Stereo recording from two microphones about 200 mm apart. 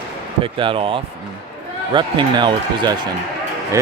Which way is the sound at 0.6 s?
25° right (ahead or behind).